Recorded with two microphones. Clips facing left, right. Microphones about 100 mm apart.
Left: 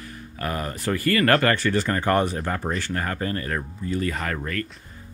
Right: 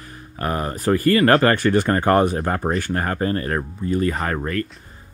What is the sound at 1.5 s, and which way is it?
Speech, 45° right (ahead or behind).